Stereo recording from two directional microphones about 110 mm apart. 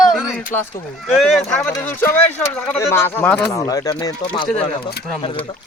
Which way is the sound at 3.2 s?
10° left (ahead or behind).